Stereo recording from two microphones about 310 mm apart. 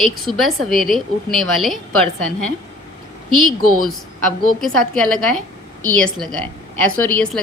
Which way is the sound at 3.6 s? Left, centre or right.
Right.